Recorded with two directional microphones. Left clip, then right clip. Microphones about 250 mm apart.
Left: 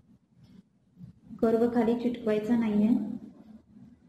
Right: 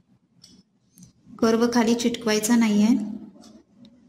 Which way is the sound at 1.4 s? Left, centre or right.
Right.